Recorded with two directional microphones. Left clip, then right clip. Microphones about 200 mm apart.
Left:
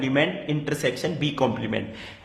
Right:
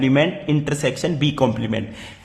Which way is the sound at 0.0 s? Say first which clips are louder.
Right 5 dB; 25° right (ahead or behind).